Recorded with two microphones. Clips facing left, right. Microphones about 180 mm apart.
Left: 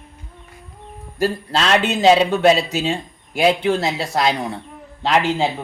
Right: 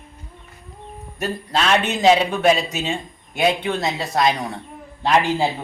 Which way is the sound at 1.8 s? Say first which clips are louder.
Left 2 dB; 25° left (ahead or behind).